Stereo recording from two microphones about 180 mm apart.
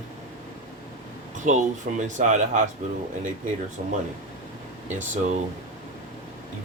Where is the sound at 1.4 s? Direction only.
45° right (ahead or behind).